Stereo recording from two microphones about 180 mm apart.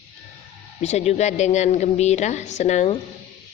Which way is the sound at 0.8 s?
40° left (ahead or behind).